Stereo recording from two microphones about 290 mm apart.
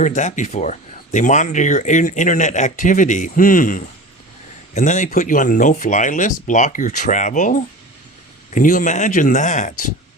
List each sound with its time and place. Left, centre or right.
0.0 s speech: left